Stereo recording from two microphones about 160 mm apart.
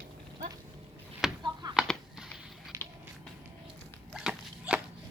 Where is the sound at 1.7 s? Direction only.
5° right (ahead or behind).